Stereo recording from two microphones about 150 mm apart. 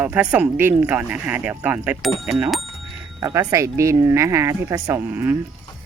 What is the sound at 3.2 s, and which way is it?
Speech, 20° right (ahead or behind).